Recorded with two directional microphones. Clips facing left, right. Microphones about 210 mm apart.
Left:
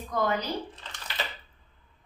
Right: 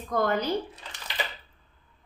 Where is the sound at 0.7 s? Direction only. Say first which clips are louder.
Right 1 dB; 10° right (ahead or behind).